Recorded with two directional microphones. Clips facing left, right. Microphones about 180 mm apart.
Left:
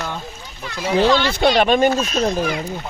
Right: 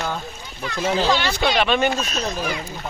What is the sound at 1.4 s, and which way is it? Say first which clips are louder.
Speech: left 7 dB; 45° left (ahead or behind).